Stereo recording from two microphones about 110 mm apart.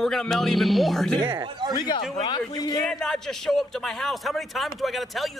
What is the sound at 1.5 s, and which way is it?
Speech, 45° right (ahead or behind).